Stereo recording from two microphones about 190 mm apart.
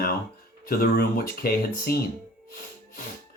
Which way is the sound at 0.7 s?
50° left (ahead or behind).